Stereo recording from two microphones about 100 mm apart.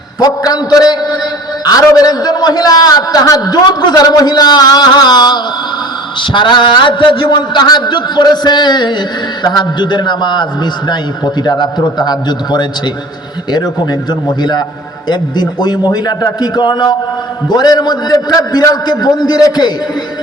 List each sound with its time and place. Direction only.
0.2 s a man's voice: 35° left (ahead or behind)
11.4 s a man's voice: 45° left (ahead or behind)